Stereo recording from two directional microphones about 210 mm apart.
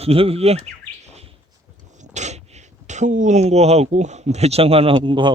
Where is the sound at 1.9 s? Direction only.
35° right (ahead or behind).